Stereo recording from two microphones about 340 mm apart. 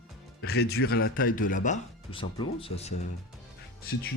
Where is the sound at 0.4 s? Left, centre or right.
Left.